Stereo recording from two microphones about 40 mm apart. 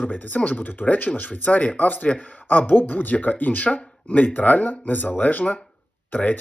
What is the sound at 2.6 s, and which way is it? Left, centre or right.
Speech, left.